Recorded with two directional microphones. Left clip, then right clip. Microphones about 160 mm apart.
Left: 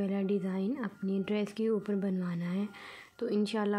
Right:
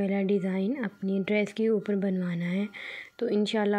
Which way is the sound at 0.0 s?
20° right (ahead or behind).